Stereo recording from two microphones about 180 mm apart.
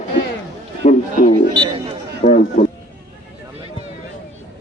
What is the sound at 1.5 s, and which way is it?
Speech, 25° right (ahead or behind).